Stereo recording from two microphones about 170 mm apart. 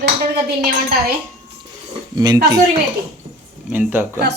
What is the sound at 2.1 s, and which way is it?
Speech, 20° right (ahead or behind).